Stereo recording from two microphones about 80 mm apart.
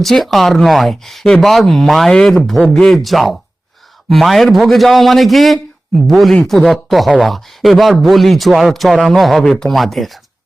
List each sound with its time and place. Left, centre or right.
0.0 s speech: centre